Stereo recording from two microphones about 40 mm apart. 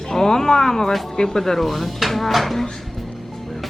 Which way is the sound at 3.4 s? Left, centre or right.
Centre.